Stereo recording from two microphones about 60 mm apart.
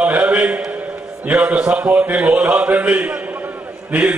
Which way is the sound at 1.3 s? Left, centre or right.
Right.